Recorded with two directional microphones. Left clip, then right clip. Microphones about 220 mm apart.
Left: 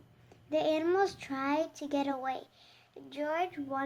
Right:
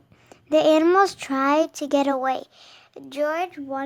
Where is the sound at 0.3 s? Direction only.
45° right (ahead or behind).